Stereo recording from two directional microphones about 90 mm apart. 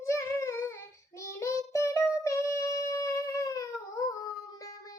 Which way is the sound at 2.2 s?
35° left (ahead or behind).